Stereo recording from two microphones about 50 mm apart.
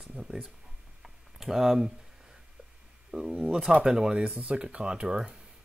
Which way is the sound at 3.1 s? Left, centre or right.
Centre.